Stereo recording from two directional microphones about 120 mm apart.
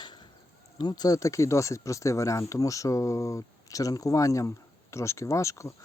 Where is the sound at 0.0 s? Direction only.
40° left (ahead or behind).